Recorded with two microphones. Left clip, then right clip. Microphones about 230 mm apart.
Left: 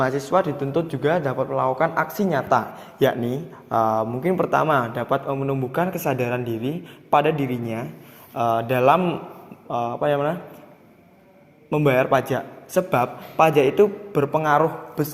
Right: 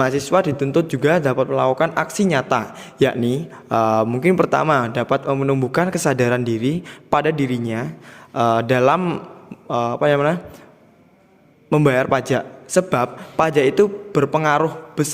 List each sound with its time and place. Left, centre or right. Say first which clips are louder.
0.0 s a man's voice: right 3 dB; right
11.7 s a man's voice: right 2 dB; right